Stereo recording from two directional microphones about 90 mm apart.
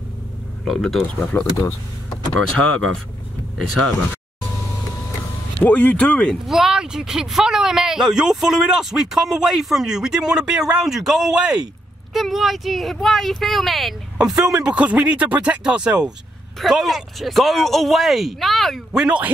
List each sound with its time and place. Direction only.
0.7 s speech: centre (ahead or behind)
1.6 s speech: 35° left (ahead or behind)
2.6 s speech: 10° left (ahead or behind)
5.6 s speech: 20° left (ahead or behind)
6.4 s a man's voice: 5° right (ahead or behind)
19.0 s a man's voice: 15° right (ahead or behind)